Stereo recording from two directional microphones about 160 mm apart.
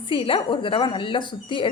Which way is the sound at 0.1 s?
30° left (ahead or behind).